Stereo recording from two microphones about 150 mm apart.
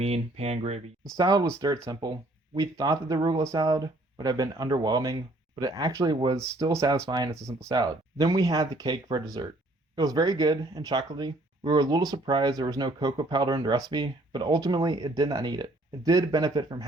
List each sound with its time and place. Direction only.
0.0 s speech: 45° right (ahead or behind)
1.1 s speech: 25° right (ahead or behind)